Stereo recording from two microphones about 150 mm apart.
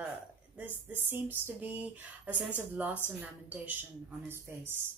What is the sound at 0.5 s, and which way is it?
A woman's voice, 10° right (ahead or behind).